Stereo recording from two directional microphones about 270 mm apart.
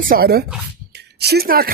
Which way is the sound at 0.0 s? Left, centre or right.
Right.